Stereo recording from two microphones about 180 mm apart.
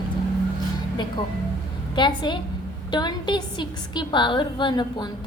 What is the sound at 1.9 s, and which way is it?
A woman's voice, 25° left (ahead or behind).